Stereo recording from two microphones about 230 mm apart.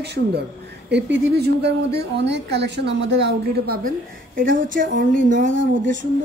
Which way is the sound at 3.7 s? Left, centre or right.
Right.